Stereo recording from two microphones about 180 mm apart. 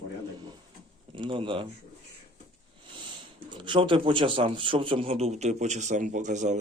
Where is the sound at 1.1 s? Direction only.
25° right (ahead or behind).